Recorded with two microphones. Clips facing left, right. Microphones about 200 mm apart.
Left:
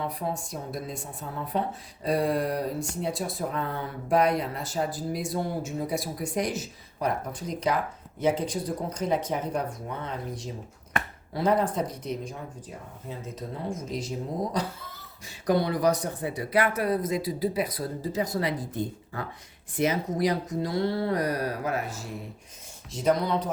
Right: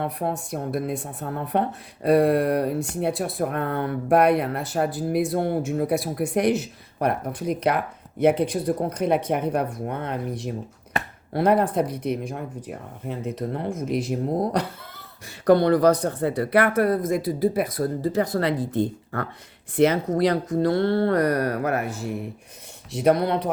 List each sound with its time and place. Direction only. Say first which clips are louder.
0.0 s speech: right 4 dB; 60° right (ahead or behind)